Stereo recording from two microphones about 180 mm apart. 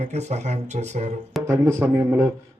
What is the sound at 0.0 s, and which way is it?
Speech, 40° right (ahead or behind).